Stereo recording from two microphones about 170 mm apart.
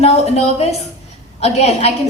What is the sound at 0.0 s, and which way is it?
A woman's voice, 40° left (ahead or behind).